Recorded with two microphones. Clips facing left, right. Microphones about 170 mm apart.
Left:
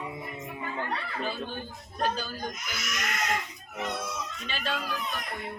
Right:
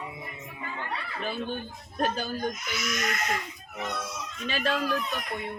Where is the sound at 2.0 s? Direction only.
55° right (ahead or behind).